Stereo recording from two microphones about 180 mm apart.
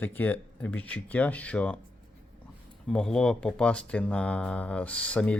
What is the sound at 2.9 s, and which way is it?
Speech, 5° left (ahead or behind).